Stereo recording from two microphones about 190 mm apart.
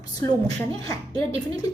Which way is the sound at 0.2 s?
20° left (ahead or behind).